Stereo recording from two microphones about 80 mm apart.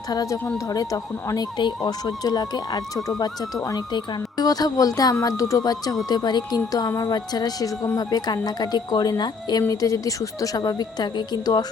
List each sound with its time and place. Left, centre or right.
0.1 s speech: left
1.5 s a woman's voice: left